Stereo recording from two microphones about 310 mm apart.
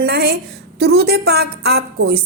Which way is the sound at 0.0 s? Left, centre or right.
Right.